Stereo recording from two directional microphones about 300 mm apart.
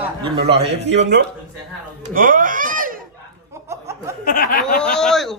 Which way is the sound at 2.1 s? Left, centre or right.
Right.